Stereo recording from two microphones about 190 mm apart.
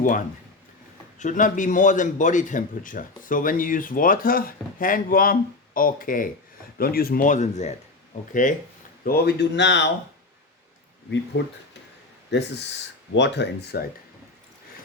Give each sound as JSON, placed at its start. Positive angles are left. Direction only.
{"t": 0.0, "sound": "speech", "side_deg": 45}
{"t": 9.0, "sound": "speech", "side_deg": 55}
{"t": 11.4, "sound": "speech", "side_deg": 65}